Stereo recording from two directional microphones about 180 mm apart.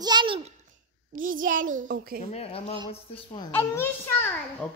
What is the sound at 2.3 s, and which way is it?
Speech, 35° left (ahead or behind).